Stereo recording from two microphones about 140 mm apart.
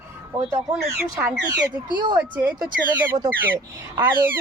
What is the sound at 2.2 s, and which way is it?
Speech, 10° right (ahead or behind).